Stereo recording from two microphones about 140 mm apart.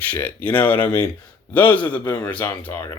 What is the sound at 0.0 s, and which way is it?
Speech, 10° left (ahead or behind).